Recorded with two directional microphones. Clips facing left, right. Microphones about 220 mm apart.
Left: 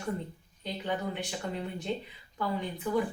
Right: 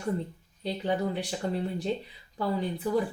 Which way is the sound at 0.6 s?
35° right (ahead or behind).